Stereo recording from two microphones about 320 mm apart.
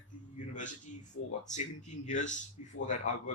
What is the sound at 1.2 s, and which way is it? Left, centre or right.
Speech, left.